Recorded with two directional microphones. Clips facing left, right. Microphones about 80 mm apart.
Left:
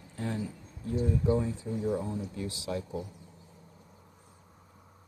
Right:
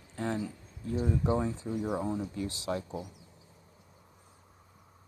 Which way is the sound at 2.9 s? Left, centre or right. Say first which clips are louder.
Left 2 dB; centre.